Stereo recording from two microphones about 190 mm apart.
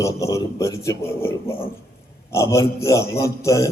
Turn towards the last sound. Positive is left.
turn(degrees=15)  # may be behind; listen again after turning